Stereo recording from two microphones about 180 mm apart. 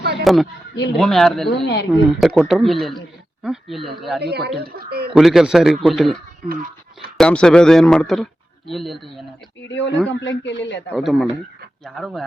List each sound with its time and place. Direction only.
0.3 s speech: centre (ahead or behind)
1.6 s speech: 65° left (ahead or behind)
1.9 s speech: centre (ahead or behind)
4.2 s speech: 65° right (ahead or behind)
5.1 s speech: centre (ahead or behind)
7.2 s speech: 5° left (ahead or behind)
9.6 s a man's voice: 80° left
10.9 s speech: centre (ahead or behind)